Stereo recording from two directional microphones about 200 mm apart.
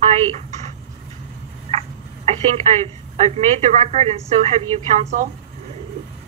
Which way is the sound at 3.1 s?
30° right (ahead or behind).